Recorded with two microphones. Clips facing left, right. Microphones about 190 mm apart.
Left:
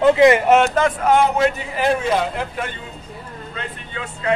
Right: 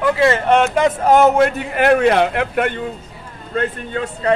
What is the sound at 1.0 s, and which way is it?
A man's voice, 45° right (ahead or behind).